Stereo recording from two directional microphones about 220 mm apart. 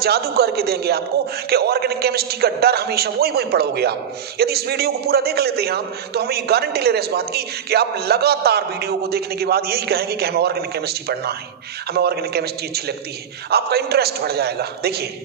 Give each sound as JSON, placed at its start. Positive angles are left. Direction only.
{"t": 0.0, "sound": "a man's voice", "side_deg": -45}